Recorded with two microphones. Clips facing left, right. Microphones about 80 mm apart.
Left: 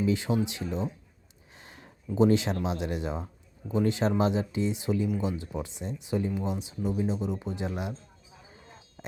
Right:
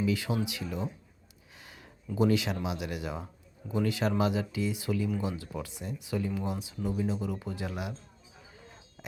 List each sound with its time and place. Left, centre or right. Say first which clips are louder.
0.0 s speech: left 3 dB; left
1.6 s a sound: left 2 dB; left
2.0 s speech: left 4 dB; left